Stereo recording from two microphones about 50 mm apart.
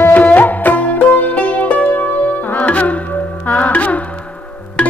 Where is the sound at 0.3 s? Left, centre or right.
Left.